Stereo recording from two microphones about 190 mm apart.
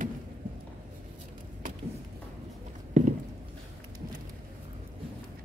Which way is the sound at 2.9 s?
35° right (ahead or behind).